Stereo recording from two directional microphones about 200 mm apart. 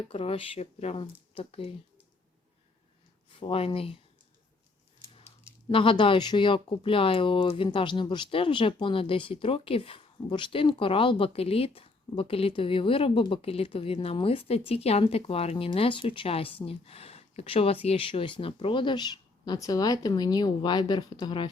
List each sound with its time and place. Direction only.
0.1 s speech: 30° left (ahead or behind)
3.4 s speech: 25° left (ahead or behind)
5.6 s speech: 25° left (ahead or behind)